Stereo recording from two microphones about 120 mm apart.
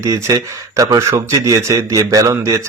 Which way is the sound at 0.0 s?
25° right (ahead or behind).